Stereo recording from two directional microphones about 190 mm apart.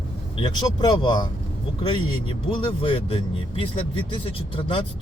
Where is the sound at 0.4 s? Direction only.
25° left (ahead or behind).